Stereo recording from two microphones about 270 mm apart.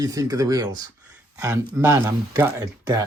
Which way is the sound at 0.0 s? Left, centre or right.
Centre.